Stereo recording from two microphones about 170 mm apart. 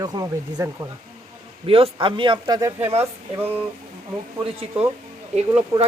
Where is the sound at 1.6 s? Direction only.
35° right (ahead or behind).